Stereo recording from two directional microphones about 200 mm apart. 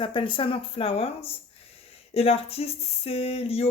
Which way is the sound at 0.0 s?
25° left (ahead or behind).